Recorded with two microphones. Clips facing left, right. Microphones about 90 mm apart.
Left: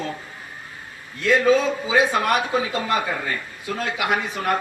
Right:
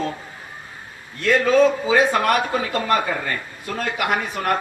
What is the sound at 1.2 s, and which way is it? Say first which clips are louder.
A man's voice: right 2 dB; 55° right (ahead or behind).